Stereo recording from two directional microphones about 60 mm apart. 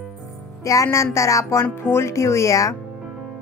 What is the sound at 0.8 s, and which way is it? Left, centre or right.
Speech, left.